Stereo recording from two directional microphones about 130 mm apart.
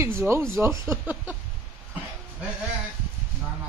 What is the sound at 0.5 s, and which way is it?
Speech, 20° right (ahead or behind).